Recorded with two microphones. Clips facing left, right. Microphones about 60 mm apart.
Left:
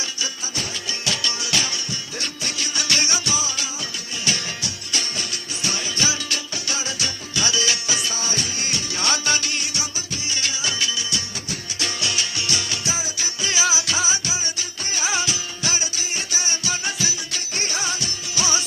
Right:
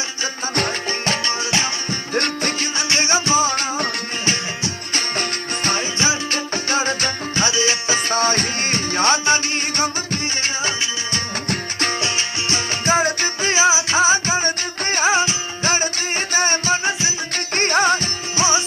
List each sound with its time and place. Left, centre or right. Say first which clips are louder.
0.5 s music: right 8 dB; right
1.9 s music: right 9 dB; right
2.7 s music: right 3 dB; right
4.3 s music: right 2 dB; right
6.5 s music: right 9 dB; right
7.4 s music: right 3 dB; right
9.7 s music: right 9 dB; right
15.1 s music: right 7 dB; right
17.3 s music: right 10 dB; right